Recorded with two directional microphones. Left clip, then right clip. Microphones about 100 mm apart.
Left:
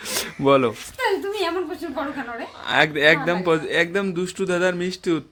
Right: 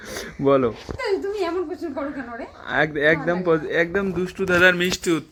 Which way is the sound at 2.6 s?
35° left (ahead or behind).